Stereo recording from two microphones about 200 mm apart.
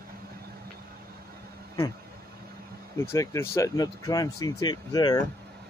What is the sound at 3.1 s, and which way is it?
Speech, 15° left (ahead or behind).